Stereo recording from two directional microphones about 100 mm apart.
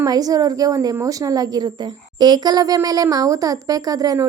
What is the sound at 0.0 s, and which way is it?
A woman's voice, 40° right (ahead or behind).